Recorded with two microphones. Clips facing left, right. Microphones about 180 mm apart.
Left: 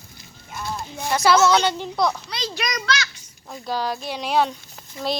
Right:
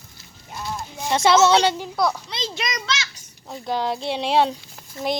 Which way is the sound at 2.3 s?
25° right (ahead or behind).